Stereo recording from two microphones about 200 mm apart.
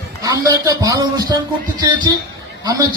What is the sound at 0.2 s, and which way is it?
Speech, 15° right (ahead or behind).